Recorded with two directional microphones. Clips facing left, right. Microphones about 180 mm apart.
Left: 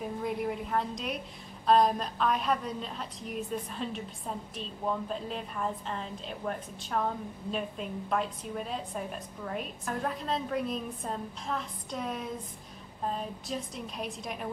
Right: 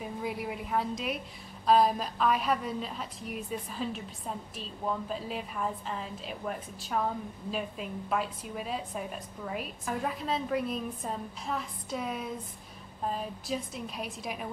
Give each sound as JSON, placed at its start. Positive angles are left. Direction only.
{"t": 0.0, "sound": "a woman's voice", "side_deg": -5}